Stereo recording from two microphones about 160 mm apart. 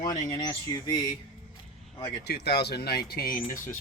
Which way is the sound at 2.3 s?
90° left.